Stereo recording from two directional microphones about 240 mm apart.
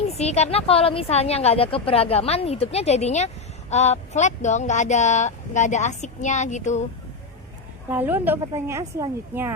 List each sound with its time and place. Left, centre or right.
0.1 s a woman's voice: left
7.9 s speech: centre